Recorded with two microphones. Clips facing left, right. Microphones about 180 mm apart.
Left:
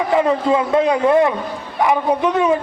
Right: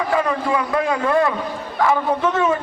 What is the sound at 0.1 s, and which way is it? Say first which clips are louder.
A man's voice: left 6 dB; 20° left (ahead or behind).